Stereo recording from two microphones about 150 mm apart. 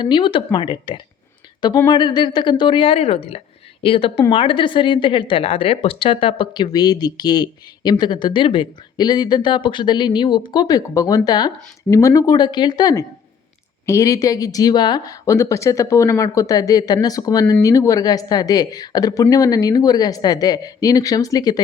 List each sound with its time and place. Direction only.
0.0 s a woman's voice: 35° left (ahead or behind)